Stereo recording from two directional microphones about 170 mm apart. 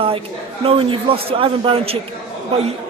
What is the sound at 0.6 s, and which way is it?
Speech, 30° right (ahead or behind).